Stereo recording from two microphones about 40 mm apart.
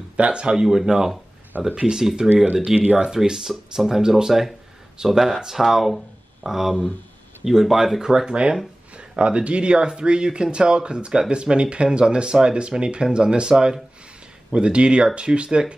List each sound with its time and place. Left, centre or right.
0.2 s speech: right
3.1 s speech: centre
8.3 s speech: right